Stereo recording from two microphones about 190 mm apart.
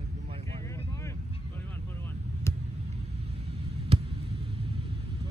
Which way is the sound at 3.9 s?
30° right (ahead or behind).